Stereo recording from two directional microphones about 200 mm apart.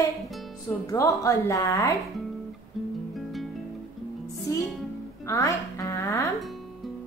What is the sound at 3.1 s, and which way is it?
Music, centre (ahead or behind).